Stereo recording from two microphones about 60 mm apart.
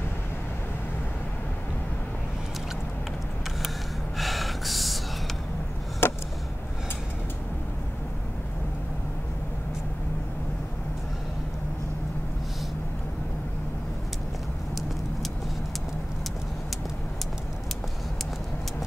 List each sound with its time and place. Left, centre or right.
4.2 s gasp: centre
6.0 s chop: left